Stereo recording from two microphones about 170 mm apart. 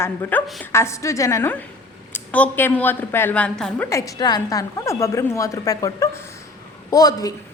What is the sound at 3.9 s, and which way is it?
A woman's voice, 20° left (ahead or behind).